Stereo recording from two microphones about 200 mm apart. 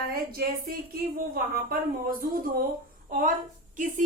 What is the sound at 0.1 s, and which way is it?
A woman's voice, 50° right (ahead or behind).